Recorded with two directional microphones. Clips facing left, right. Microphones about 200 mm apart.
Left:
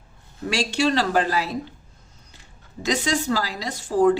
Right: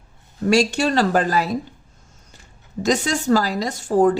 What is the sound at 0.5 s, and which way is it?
Speech, 45° right (ahead or behind).